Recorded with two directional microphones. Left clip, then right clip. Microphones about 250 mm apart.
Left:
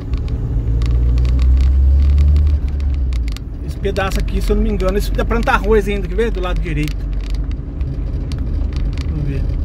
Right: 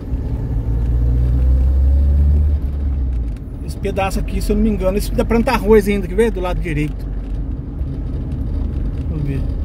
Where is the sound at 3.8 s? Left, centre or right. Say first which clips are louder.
Even; centre.